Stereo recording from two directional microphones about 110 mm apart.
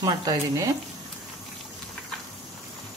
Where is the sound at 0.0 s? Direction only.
35° right (ahead or behind).